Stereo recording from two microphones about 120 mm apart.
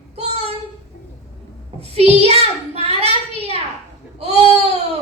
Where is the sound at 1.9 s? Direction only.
60° right (ahead or behind).